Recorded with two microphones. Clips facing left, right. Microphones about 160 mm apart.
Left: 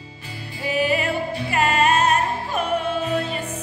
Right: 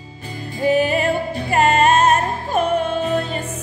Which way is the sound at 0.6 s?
40° right (ahead or behind).